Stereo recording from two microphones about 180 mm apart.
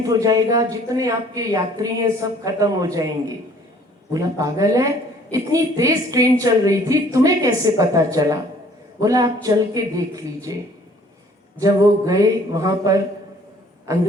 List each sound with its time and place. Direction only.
0.0 s a woman's voice: 20° right (ahead or behind)